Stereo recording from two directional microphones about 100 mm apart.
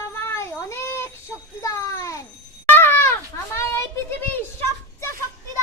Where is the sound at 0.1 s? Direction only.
25° left (ahead or behind).